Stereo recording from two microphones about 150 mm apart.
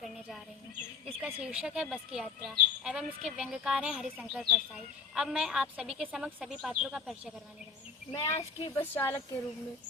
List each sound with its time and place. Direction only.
1.2 s speech: 5° right (ahead or behind)
8.2 s speech: 20° left (ahead or behind)